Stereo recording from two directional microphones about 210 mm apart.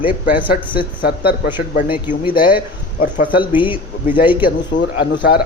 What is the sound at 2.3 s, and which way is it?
Speech, 45° left (ahead or behind).